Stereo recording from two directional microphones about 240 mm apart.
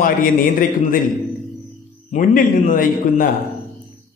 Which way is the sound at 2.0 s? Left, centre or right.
Left.